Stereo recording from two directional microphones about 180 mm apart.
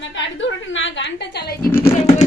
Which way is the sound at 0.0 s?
90° left.